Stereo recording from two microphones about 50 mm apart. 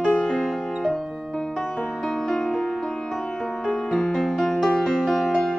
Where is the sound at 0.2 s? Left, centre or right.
Centre.